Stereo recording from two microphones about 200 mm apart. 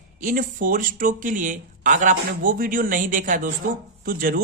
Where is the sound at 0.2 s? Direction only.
40° right (ahead or behind).